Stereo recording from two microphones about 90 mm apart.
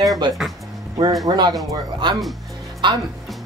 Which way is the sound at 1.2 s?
50° right (ahead or behind).